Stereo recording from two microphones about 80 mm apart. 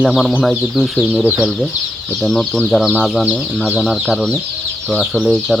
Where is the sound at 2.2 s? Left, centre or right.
Centre.